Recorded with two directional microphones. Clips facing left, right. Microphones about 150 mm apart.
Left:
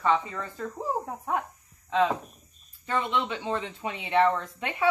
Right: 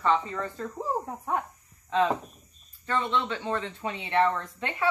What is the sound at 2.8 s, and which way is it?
Speech, 15° left (ahead or behind).